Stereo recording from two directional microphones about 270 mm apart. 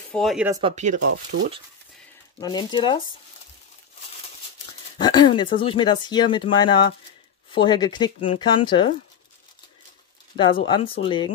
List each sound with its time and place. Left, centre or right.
0.1 s speech: centre
0.5 s speech: centre
1.3 s speech: right
2.4 s speech: centre
4.9 s speech: centre
10.3 s speech: centre